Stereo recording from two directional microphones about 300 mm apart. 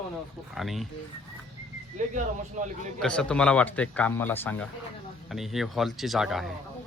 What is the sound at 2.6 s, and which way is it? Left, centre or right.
Speech, right.